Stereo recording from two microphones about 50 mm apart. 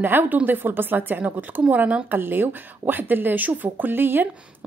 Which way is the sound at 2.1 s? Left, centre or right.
Right.